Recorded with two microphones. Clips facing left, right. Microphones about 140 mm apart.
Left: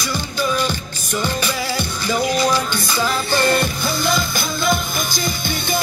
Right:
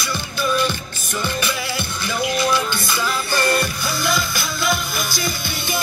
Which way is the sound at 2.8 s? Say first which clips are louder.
Left 2 dB; 20° left (ahead or behind).